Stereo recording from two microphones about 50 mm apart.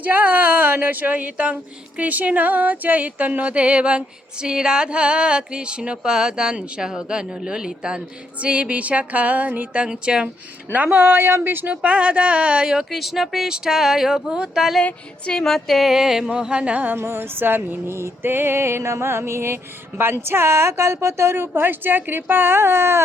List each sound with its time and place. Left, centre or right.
0.0 s speech: right
9.7 s speech: centre
10.7 s a sound: right
11.7 s speech: right
12.9 s speech: centre
15.3 s a woman's voice: centre; by 16.8 s right
16.8 s a sound: right
17.9 s a woman's voice: right